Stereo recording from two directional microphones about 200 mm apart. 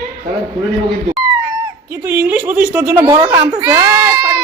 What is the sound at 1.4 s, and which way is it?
A woman's voice, 10° right (ahead or behind).